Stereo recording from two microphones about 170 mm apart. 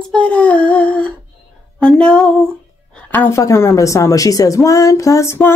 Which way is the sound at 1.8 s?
5° left (ahead or behind).